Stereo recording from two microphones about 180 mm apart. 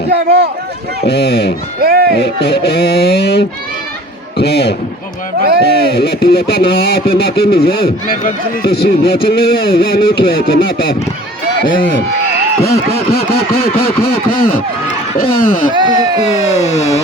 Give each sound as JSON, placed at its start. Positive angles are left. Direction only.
{"t": 0.1, "sound": "speech", "side_deg": -75}
{"t": 1.0, "sound": "speech", "side_deg": 65}
{"t": 1.8, "sound": "speech", "side_deg": -55}
{"t": 2.1, "sound": "a man's voice", "side_deg": 65}
{"t": 5.4, "sound": "speech", "side_deg": -60}
{"t": 5.8, "sound": "speech", "side_deg": 60}
{"t": 12.6, "sound": "speech", "side_deg": 60}
{"t": 14.1, "sound": "a sound", "side_deg": 55}
{"t": 15.2, "sound": "speech", "side_deg": 50}
{"t": 15.7, "sound": "speech", "side_deg": -25}
{"t": 16.5, "sound": "a sound", "side_deg": 40}